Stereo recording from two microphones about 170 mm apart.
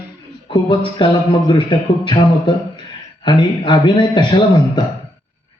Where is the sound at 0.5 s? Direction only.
30° left (ahead or behind).